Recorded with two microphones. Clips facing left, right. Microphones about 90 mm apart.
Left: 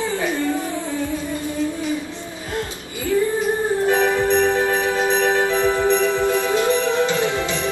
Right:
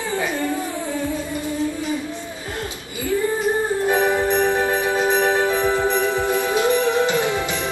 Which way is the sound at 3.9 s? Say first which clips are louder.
Left 1 dB; 20° right (ahead or behind).